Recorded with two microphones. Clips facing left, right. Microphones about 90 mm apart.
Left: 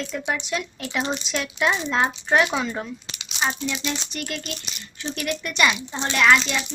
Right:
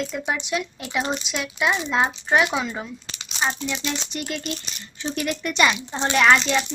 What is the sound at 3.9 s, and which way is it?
Speech, 20° right (ahead or behind).